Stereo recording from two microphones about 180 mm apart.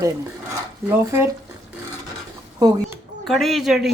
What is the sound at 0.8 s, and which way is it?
Speech, 15° right (ahead or behind).